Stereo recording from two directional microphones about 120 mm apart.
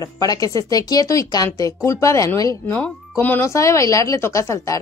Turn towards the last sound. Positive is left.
turn(degrees=25)  # may be behind; listen again after turning